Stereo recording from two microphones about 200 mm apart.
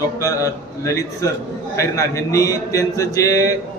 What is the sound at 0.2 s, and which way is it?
A man's voice, 15° left (ahead or behind).